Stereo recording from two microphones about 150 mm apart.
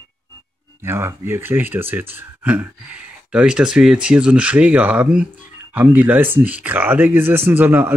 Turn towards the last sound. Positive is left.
turn(degrees=-15)  # may be behind; listen again after turning